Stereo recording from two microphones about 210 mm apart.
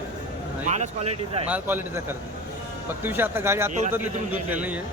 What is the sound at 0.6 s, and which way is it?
Speech, 35° right (ahead or behind).